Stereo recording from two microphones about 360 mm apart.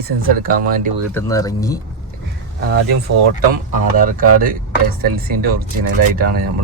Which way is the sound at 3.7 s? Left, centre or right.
Right.